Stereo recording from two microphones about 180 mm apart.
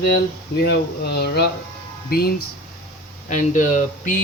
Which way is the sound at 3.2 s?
50° left (ahead or behind).